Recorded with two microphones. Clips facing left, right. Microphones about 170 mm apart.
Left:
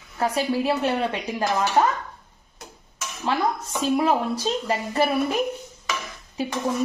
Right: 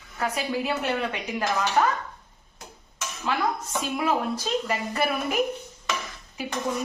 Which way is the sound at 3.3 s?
30° left (ahead or behind).